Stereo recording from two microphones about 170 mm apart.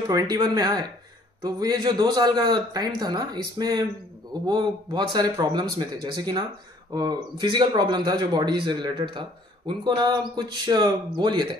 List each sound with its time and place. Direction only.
0.1 s speech: 25° right (ahead or behind)